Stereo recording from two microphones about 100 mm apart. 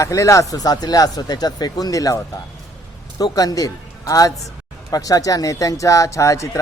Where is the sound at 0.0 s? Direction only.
30° left (ahead or behind).